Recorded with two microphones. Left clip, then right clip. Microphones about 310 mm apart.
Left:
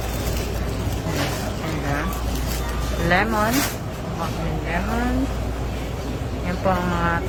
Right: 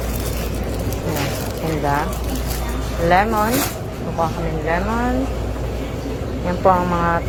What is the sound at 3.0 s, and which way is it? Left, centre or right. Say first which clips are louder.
Speech: right 4 dB; centre.